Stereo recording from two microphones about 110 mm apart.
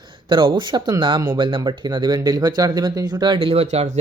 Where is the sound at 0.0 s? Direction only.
45° right (ahead or behind).